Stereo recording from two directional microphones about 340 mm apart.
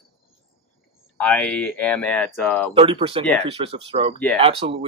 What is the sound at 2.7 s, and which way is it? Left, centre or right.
Speech, centre.